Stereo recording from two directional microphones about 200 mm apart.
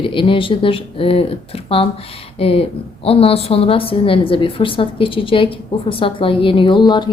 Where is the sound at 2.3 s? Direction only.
30° left (ahead or behind).